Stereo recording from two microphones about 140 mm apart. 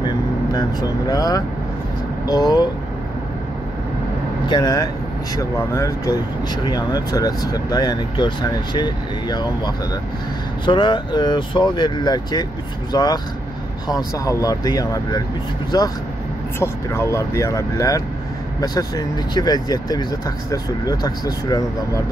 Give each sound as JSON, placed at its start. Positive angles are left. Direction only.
{"t": 0.0, "sound": "speech", "side_deg": 30}
{"t": 4.5, "sound": "speech", "side_deg": 30}
{"t": 16.5, "sound": "speech", "side_deg": 20}